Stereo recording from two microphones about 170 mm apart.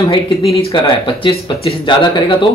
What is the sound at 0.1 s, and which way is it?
Speech, 35° left (ahead or behind).